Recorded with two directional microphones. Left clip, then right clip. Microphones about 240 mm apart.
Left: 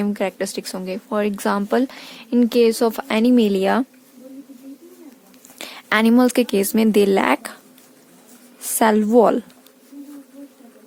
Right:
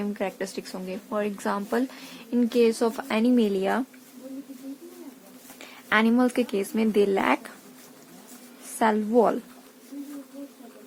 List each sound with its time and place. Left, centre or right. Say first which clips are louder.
0.0 s speech: left 7 dB; left
5.5 s speech: left 4 dB; left
8.8 s speech: left 7 dB; left